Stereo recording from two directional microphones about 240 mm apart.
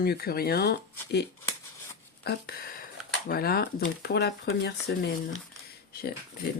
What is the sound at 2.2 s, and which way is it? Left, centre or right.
Speech, left.